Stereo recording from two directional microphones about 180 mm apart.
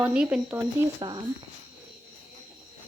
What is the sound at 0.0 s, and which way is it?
Speech, 5° right (ahead or behind).